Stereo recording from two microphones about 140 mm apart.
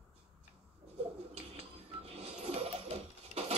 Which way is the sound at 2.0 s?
45° right (ahead or behind).